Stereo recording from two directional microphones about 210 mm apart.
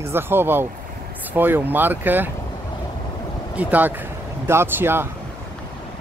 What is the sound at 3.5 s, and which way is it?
Speech, 10° right (ahead or behind).